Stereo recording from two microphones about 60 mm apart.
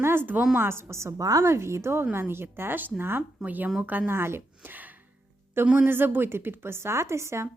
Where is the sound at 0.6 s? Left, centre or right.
Right.